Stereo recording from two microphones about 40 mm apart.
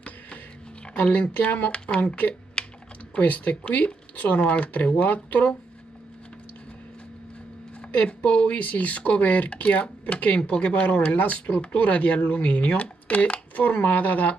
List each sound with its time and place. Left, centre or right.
1.0 s speech: left
2.6 s typing: left
3.2 s speech: left
8.0 s speech: left
11.1 s speech: left
11.5 s speech: left
11.8 s speech: left